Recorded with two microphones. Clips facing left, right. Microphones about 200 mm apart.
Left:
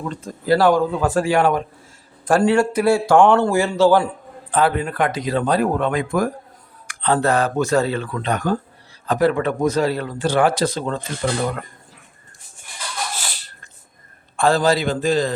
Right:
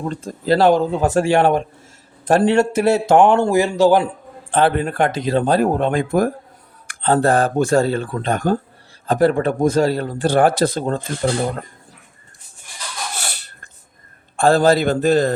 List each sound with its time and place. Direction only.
0.4 s speech: 25° right (ahead or behind)
4.5 s speech: 30° right (ahead or behind)
6.8 s speech: 50° right (ahead or behind)
8.0 s speech: 35° right (ahead or behind)
8.3 s speech: 50° right (ahead or behind)
11.0 s speech: 35° right (ahead or behind)
13.1 s a sound: 65° right (ahead or behind)
14.3 s a man's voice: 50° right (ahead or behind)